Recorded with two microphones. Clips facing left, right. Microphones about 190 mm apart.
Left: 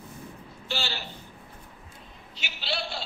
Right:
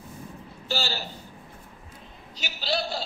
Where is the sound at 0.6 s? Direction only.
40° right (ahead or behind).